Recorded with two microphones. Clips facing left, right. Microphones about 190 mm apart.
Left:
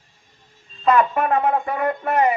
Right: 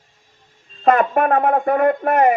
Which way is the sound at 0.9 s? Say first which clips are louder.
Right 3 dB; 50° right (ahead or behind).